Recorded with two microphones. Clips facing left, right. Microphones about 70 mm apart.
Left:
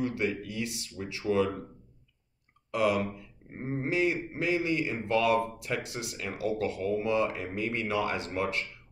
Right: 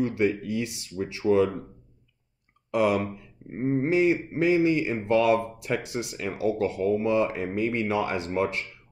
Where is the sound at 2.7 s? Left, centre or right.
Right.